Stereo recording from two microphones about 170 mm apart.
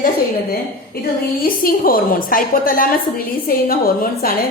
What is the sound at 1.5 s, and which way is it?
A woman's voice, 55° left (ahead or behind).